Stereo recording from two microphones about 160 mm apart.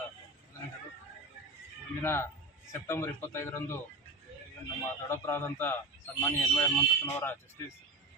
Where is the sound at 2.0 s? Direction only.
15° left (ahead or behind).